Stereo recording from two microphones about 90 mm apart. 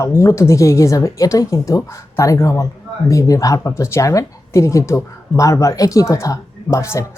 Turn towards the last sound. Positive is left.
turn(degrees=35)  # may be behind; listen again after turning